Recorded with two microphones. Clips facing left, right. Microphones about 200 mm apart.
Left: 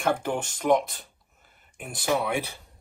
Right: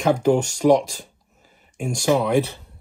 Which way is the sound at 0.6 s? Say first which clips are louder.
Right 6 dB; 40° right (ahead or behind).